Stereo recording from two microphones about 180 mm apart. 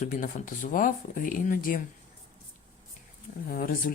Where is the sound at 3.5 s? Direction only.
50° left (ahead or behind).